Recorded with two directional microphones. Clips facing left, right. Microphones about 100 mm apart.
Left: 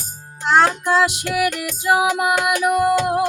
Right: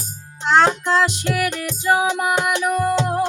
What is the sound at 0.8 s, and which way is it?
Music, 10° left (ahead or behind).